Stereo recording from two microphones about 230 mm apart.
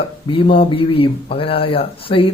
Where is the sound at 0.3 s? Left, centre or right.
Left.